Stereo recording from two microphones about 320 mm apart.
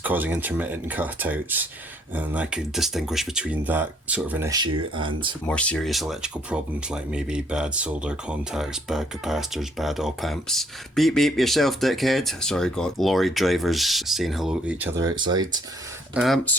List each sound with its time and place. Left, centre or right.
0.0 s speech: centre
5.5 s speech: centre
16.1 s speech: centre